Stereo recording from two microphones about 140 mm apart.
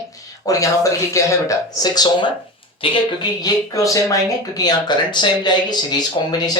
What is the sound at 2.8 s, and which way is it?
Speech, 40° left (ahead or behind).